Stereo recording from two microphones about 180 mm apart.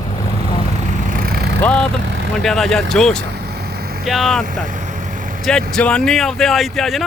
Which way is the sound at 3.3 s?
60° right (ahead or behind).